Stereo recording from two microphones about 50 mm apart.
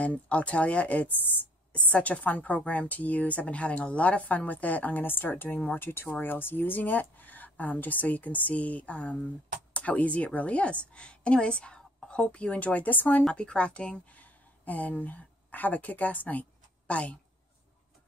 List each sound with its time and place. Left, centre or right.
0.0 s a woman's voice: left
13.3 s a woman's voice: left
14.2 s speech: left